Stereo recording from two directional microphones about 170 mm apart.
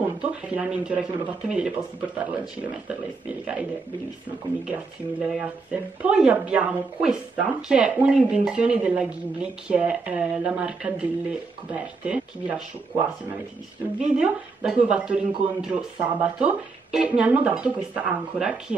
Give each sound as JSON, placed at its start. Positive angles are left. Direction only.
{"t": 0.0, "sound": "speech", "side_deg": -5}
{"t": 4.6, "sound": "speech", "side_deg": -5}
{"t": 13.9, "sound": "speech", "side_deg": -5}